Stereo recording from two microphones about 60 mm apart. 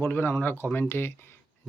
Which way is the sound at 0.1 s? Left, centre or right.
Left.